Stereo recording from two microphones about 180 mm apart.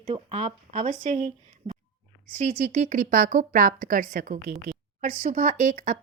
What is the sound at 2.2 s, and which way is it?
Speech, 50° right (ahead or behind).